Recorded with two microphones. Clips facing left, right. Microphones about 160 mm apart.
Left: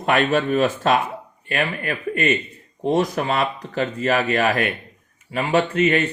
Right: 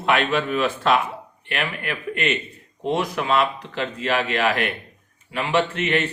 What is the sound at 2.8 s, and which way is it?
Speech, 40° left (ahead or behind).